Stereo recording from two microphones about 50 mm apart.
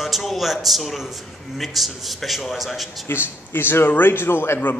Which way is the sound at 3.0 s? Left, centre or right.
Left.